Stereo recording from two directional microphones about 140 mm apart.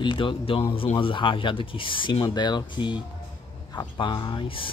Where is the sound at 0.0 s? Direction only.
35° left (ahead or behind).